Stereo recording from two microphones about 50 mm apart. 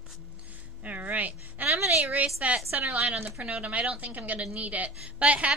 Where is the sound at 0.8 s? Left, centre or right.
Right.